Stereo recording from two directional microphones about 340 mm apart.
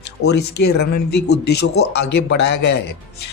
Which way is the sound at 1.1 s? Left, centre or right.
Left.